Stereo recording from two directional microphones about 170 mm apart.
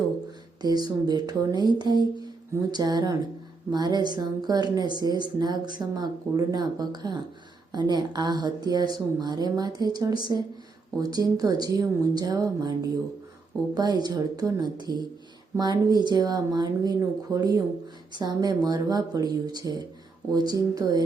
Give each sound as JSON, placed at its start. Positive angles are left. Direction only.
{"t": 0.6, "sound": "a woman's voice", "side_deg": -25}